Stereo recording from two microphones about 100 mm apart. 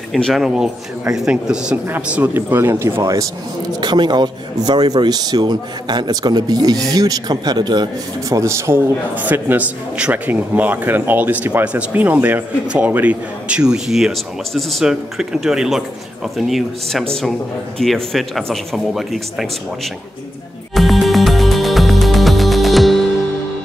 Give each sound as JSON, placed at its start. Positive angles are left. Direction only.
{"t": 0.1, "sound": "a man's voice", "side_deg": 0}
{"t": 3.8, "sound": "a man's voice", "side_deg": -45}
{"t": 8.3, "sound": "a man's voice", "side_deg": -30}
{"t": 20.7, "sound": "music", "side_deg": 0}